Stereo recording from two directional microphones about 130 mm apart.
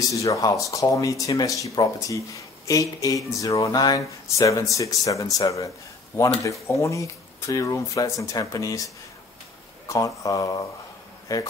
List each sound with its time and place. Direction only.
0.0 s speech: 25° left (ahead or behind)
9.8 s speech: 25° left (ahead or behind)